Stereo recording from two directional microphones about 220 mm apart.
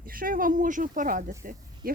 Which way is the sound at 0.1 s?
40° right (ahead or behind).